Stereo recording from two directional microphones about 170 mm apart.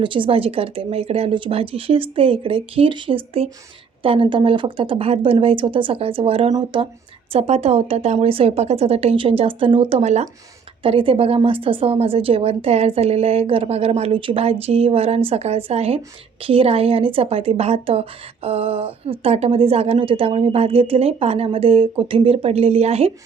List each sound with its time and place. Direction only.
0.0 s a woman's voice: 30° right (ahead or behind)
7.3 s a woman's voice: 40° right (ahead or behind)